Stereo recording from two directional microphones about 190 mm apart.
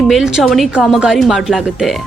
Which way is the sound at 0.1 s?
Centre (ahead or behind).